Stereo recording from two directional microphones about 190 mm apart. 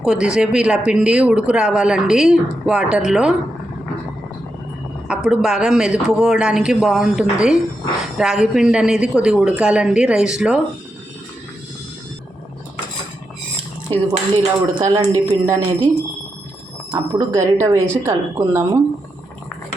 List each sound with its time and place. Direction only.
0.0 s a man's voice: 5° right (ahead or behind)
5.0 s a man's voice: 5° right (ahead or behind)
14.3 s speech: 15° right (ahead or behind)
16.9 s speech: 20° right (ahead or behind)